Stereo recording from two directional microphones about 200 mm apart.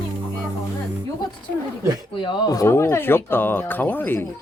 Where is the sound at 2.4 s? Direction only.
15° left (ahead or behind).